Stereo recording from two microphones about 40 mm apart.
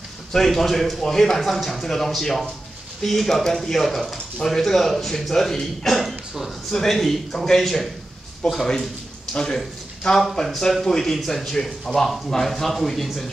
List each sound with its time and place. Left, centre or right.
0.3 s speech: centre